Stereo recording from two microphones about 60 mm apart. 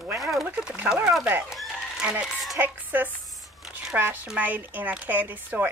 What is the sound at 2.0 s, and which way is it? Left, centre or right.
Speech, centre.